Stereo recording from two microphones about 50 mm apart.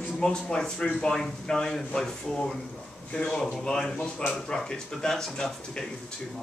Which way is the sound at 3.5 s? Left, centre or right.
Centre.